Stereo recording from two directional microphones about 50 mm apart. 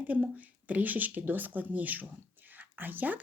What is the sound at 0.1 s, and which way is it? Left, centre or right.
Speech, right.